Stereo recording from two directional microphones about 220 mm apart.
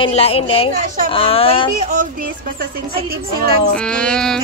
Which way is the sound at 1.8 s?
30° right (ahead or behind).